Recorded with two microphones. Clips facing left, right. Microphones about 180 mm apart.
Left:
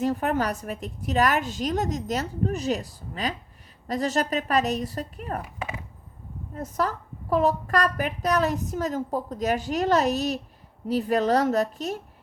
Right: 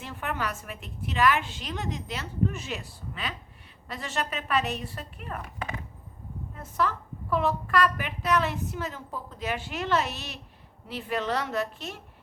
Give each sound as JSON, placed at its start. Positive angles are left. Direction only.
{"t": 0.0, "sound": "a woman's voice", "side_deg": 40}
{"t": 6.5, "sound": "a woman's voice", "side_deg": 40}